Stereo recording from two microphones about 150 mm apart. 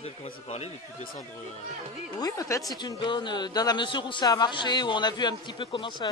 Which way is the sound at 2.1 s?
25° left (ahead or behind).